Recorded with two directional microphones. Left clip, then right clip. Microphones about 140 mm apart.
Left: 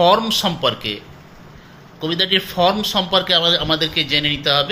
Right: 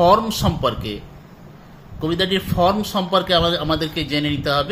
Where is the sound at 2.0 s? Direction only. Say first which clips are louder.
Left 3 dB; 40° right (ahead or behind).